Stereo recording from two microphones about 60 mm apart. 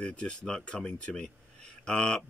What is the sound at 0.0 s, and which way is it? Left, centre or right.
Speech, centre.